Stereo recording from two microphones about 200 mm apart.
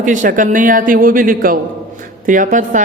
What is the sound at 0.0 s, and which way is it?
A man's voice, 40° right (ahead or behind).